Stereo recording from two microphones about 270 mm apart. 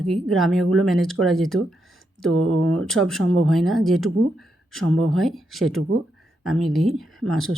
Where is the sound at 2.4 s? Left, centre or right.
Right.